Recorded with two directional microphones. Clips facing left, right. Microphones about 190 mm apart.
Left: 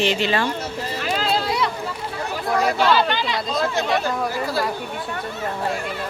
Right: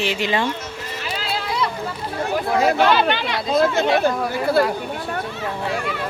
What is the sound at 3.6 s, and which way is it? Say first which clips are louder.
Speech: right 5 dB; 55° right (ahead or behind).